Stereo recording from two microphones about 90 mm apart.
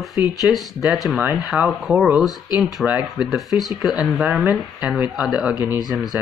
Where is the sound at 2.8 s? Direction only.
20° right (ahead or behind).